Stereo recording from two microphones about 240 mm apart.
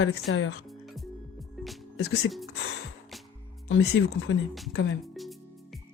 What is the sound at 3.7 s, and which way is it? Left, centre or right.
Speech, left.